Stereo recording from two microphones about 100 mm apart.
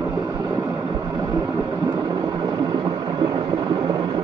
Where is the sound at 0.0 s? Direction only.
35° right (ahead or behind).